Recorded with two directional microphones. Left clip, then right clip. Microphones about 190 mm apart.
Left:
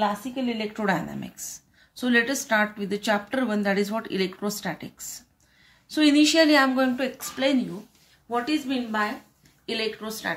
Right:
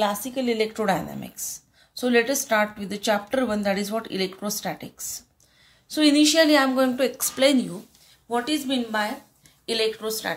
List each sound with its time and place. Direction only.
0.0 s a woman's voice: 15° right (ahead or behind)
0.8 s a woman's voice: centre (ahead or behind)
7.0 s speech: 20° right (ahead or behind)
9.7 s a woman's voice: 20° right (ahead or behind)